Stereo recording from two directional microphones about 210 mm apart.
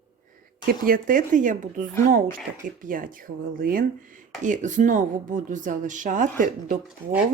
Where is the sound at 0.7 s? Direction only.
40° right (ahead or behind).